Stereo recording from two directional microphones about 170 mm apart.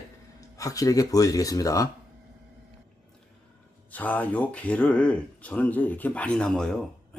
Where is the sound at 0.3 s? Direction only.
20° left (ahead or behind).